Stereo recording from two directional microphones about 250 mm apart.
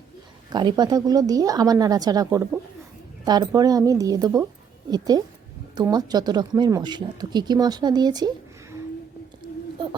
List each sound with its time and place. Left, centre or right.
0.5 s speech: centre